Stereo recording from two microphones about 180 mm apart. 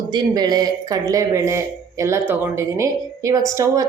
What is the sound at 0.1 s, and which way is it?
Speech, 20° right (ahead or behind).